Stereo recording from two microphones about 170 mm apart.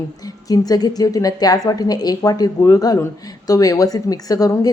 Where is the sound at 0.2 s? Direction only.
20° left (ahead or behind).